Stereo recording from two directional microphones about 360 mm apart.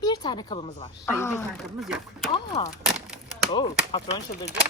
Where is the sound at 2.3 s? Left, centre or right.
Centre.